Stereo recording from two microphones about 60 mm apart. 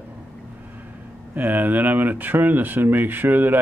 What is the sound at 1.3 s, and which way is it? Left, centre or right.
Speech, right.